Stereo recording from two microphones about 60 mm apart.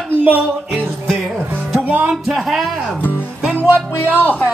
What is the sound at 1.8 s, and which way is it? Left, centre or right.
Music, right.